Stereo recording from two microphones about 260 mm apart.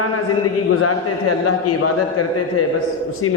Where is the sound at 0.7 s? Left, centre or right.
Left.